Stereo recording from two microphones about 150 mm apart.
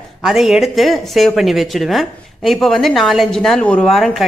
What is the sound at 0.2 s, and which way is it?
Speech, centre (ahead or behind).